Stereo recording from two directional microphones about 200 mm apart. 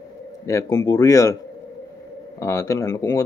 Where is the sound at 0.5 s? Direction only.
15° left (ahead or behind).